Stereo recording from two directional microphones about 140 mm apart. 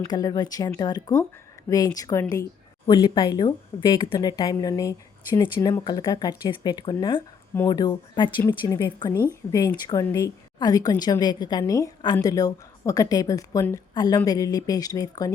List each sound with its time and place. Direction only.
0.1 s a woman's voice: 25° left (ahead or behind)